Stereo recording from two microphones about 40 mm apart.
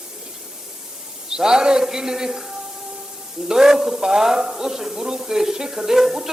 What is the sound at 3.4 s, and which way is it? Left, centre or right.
A man's voice, centre.